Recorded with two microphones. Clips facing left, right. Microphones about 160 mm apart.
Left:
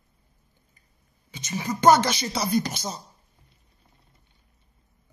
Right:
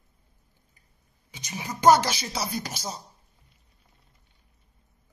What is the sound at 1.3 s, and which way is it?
A woman's voice, 10° right (ahead or behind).